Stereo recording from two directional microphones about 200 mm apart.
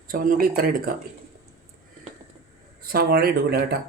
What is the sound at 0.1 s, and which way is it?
Speech, 45° right (ahead or behind).